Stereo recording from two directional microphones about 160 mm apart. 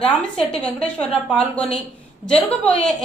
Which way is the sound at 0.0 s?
5° left (ahead or behind).